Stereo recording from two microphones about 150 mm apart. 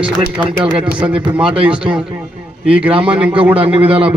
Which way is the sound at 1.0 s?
10° right (ahead or behind).